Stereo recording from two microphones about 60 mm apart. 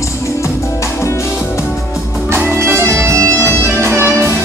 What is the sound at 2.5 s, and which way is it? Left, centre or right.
Music, right.